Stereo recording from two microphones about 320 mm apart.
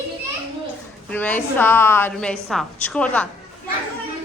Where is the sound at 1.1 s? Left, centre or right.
Centre.